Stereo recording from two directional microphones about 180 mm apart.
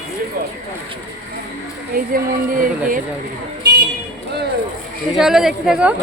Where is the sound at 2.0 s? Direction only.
50° right (ahead or behind).